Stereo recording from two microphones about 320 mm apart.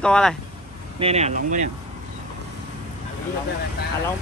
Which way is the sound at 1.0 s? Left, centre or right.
Centre.